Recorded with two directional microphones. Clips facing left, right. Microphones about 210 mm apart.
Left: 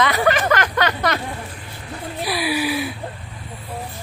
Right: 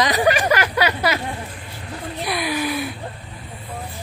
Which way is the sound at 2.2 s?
5° left (ahead or behind).